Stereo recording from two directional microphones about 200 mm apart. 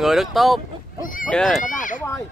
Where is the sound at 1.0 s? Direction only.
40° left (ahead or behind).